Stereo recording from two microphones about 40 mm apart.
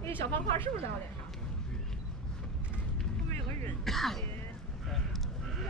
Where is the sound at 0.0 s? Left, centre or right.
Left.